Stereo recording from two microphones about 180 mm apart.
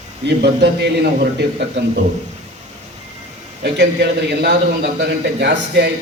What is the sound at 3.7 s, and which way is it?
A man's voice, 70° right (ahead or behind).